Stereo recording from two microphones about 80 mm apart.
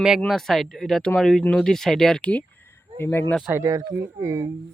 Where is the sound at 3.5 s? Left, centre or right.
Right.